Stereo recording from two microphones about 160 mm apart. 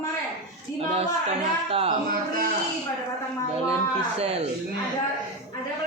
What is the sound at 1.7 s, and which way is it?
Speech, 40° right (ahead or behind).